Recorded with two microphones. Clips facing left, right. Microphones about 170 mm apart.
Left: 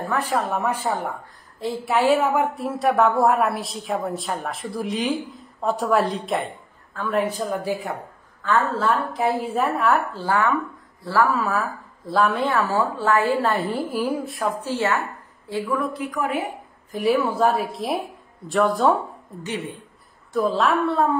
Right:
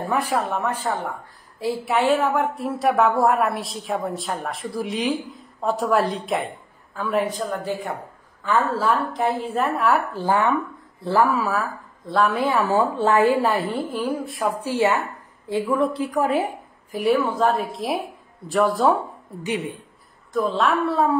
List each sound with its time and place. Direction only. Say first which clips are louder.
0.0 s a woman's voice: right 1 dB; 10° right (ahead or behind)
0.4 s speech: left 1 dB; 10° left (ahead or behind)
1.6 s a woman's voice: even; 5° right (ahead or behind)
7.4 s speech: left 1 dB; 15° left (ahead or behind)
8.4 s a woman's voice: even; 10° right (ahead or behind)
10.1 s a woman's voice: right 1 dB; 20° right (ahead or behind)
11.5 s a woman's voice: even; centre (ahead or behind)
12.4 s a woman's voice: right 2 dB; 10° right (ahead or behind)
13.5 s a woman's voice: even; centre (ahead or behind)
14.6 s a woman's voice: right 5 dB; 10° right (ahead or behind); by 16.3 s 30° right (ahead or behind)
16.9 s a woman's voice: even; centre (ahead or behind)
19.4 s a woman's voice: right 3 dB; 15° right (ahead or behind)
20.3 s a woman's voice: left 1 dB; centre (ahead or behind)